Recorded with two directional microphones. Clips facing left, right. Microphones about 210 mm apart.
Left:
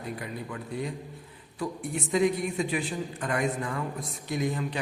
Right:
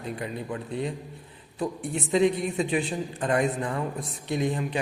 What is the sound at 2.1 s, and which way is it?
A man's voice, 25° right (ahead or behind).